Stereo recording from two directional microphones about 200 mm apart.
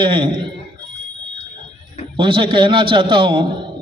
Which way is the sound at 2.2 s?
25° right (ahead or behind).